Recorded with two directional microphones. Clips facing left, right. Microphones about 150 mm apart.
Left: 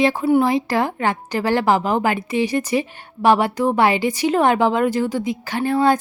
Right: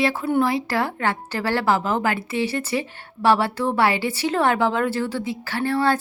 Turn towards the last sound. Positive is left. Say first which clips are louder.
# left 4 dB
turn(degrees=15)  # may be behind; listen again after turning